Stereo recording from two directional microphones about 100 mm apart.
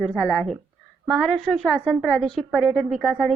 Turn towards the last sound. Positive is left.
turn(degrees=0)  # may be behind; listen again after turning